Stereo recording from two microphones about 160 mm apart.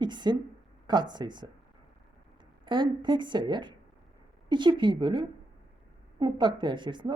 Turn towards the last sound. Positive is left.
turn(degrees=-30)  # may be behind; listen again after turning